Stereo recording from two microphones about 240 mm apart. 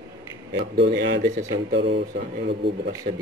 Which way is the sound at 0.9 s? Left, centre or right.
Right.